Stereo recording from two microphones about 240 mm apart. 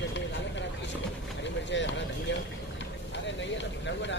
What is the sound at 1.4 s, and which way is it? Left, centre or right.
Vehicle, left.